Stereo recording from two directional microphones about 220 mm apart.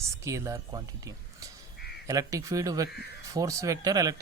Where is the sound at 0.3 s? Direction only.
15° right (ahead or behind).